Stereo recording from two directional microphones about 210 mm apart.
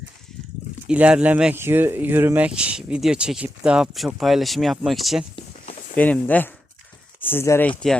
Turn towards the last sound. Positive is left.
turn(degrees=10)  # may be behind; listen again after turning